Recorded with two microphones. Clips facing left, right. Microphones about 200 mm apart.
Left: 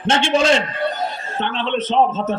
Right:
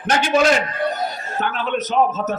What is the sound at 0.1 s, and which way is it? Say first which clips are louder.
Speech: even; 25° left (ahead or behind).